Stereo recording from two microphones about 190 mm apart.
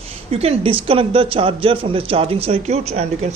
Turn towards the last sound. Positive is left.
turn(degrees=-35)  # may be behind; listen again after turning